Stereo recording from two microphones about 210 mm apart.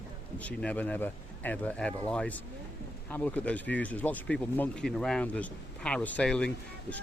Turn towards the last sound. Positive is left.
turn(degrees=5)  # may be behind; listen again after turning